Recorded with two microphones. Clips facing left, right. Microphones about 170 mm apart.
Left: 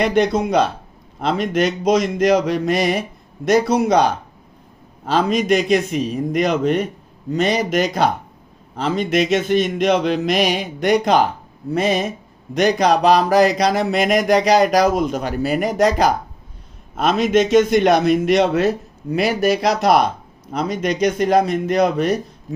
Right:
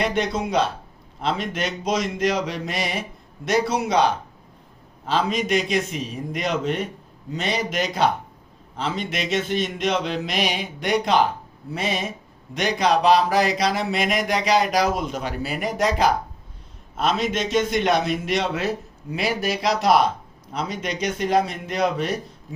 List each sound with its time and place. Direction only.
1.2 s speech: 45° left (ahead or behind)